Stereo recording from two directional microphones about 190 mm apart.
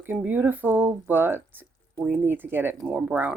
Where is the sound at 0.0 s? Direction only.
10° right (ahead or behind).